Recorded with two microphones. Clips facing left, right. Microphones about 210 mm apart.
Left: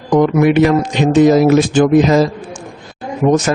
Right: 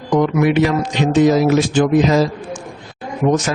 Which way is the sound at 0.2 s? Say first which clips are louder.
Left 4 dB; 50° left (ahead or behind).